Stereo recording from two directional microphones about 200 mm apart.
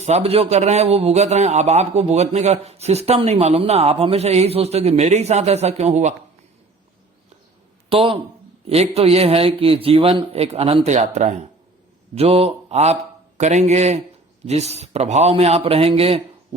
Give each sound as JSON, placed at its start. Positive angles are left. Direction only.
{"t": 0.0, "sound": "a man's voice", "side_deg": -30}
{"t": 7.9, "sound": "a man's voice", "side_deg": -25}